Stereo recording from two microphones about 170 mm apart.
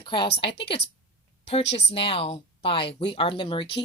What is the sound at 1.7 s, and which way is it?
Speech, 35° left (ahead or behind).